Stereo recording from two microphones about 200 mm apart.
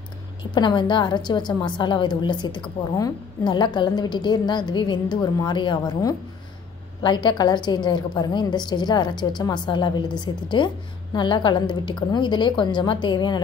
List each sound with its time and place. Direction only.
0.4 s a woman's voice: 20° left (ahead or behind)